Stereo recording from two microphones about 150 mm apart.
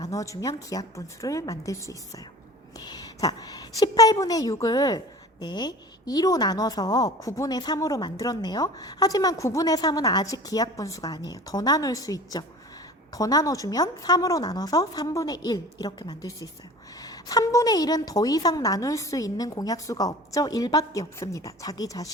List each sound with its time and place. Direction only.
0.0 s a woman's voice: 20° left (ahead or behind)